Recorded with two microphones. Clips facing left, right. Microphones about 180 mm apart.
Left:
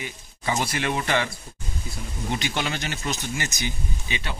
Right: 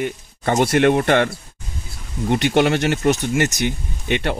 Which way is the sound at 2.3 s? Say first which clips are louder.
Right 12 dB; 60° right (ahead or behind).